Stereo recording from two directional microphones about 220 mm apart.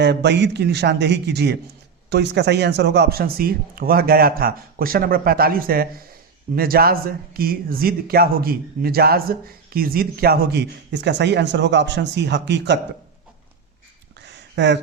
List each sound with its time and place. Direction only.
0.0 s speech: 50° right (ahead or behind)
14.5 s speech: 55° right (ahead or behind)